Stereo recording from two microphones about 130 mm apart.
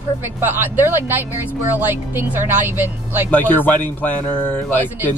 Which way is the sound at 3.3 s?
10° left (ahead or behind).